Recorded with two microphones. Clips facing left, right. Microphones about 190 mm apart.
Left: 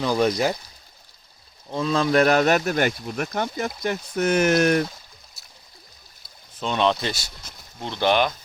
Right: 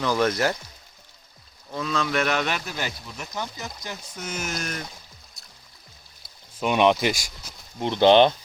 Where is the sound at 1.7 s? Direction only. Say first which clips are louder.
Left 6 dB; 30° left (ahead or behind); by 4.8 s 65° left (ahead or behind).